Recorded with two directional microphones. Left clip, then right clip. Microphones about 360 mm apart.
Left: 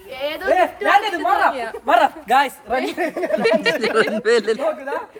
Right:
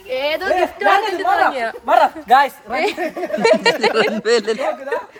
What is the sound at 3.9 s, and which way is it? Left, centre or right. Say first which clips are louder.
Speech: right 1 dB; centre.